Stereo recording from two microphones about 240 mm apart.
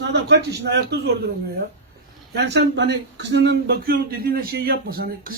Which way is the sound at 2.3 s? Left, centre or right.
Right.